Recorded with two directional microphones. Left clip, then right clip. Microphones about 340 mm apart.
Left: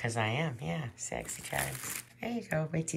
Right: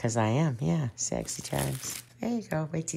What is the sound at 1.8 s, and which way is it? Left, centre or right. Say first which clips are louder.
Speech: right 4 dB; centre.